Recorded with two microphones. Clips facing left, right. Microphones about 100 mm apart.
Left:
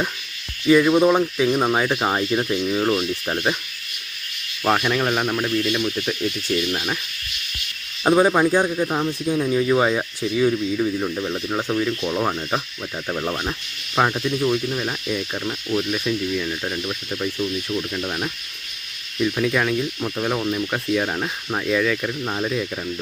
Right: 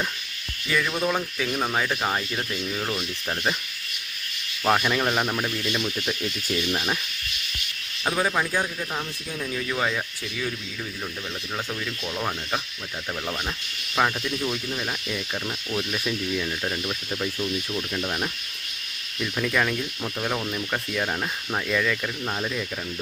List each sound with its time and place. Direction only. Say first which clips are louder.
0.7 s speech: left 10 dB; 25° left (ahead or behind)
4.6 s speech: left 2 dB; 5° left (ahead or behind)
8.0 s speech: left 9 dB; 30° left (ahead or behind); by 22.6 s 10° left (ahead or behind)